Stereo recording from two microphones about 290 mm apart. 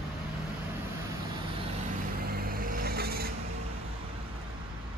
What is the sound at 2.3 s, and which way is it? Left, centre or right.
Vehicle, right.